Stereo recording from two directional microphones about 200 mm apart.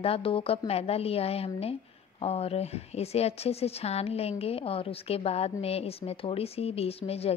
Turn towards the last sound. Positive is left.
turn(degrees=30)  # may be behind; listen again after turning